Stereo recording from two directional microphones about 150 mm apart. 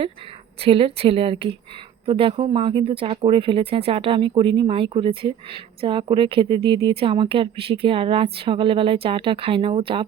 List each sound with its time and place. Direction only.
0.6 s speech: 40° right (ahead or behind)